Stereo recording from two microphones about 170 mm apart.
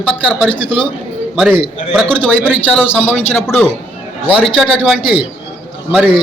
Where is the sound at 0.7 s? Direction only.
30° left (ahead or behind).